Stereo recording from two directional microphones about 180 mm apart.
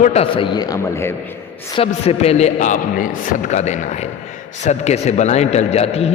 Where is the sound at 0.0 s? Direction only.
35° left (ahead or behind); by 1.1 s 15° left (ahead or behind).